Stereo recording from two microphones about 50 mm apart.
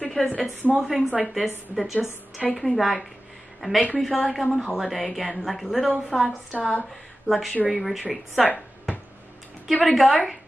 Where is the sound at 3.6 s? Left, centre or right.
Centre.